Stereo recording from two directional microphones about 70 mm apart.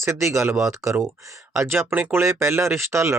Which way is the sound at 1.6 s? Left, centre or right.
Right.